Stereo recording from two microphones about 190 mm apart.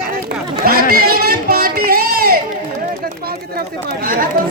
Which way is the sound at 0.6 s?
50° right (ahead or behind).